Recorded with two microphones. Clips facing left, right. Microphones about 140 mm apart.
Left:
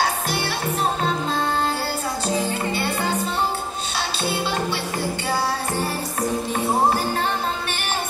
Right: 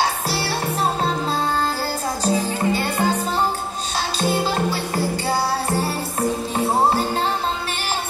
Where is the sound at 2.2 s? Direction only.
40° right (ahead or behind).